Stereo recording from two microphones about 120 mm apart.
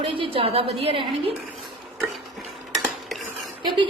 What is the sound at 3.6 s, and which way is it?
Speech, 45° right (ahead or behind).